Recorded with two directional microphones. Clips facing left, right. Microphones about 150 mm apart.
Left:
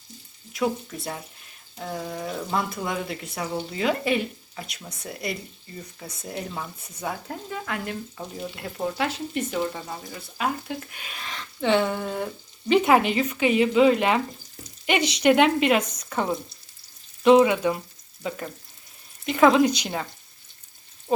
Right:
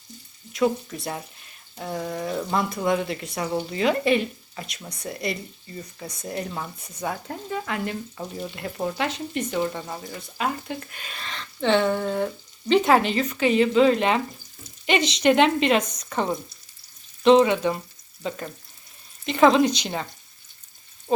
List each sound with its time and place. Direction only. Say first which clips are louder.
0.5 s speech: right 3 dB; 5° left (ahead or behind)
17.2 s speech: even; 10° left (ahead or behind)